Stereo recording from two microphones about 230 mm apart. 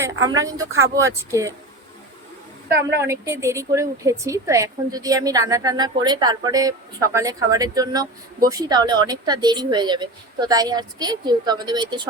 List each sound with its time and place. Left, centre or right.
0.0 s a woman's voice: centre
2.6 s a woman's voice: right
3.0 s a woman's voice: centre